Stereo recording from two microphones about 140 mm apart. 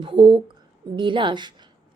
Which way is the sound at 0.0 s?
35° right (ahead or behind).